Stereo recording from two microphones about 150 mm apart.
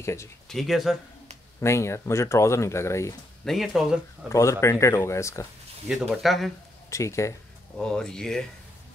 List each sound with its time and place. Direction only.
0.0 s speech: 20° left (ahead or behind)
0.5 s speech: centre (ahead or behind)
1.6 s speech: 20° left (ahead or behind)
3.4 s speech: centre (ahead or behind)
4.3 s speech: 20° left (ahead or behind)
5.9 s speech: centre (ahead or behind)
6.9 s speech: 20° left (ahead or behind)
7.7 s speech: 5° left (ahead or behind)